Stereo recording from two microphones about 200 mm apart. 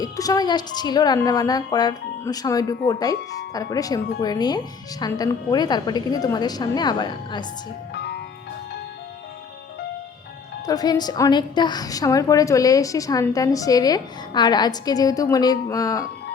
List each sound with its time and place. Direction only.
0.0 s a woman's voice: 20° left (ahead or behind)
7.9 s music: 55° left (ahead or behind)
10.7 s a woman's voice: 20° left (ahead or behind)